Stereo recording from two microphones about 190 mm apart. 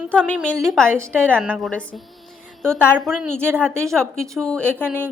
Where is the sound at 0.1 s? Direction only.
5° left (ahead or behind).